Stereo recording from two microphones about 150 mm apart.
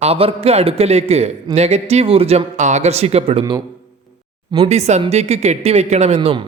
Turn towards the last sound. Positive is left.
turn(degrees=-50)  # may be behind; listen again after turning